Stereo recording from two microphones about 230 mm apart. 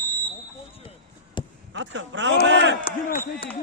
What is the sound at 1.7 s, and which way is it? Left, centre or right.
A man's voice, right.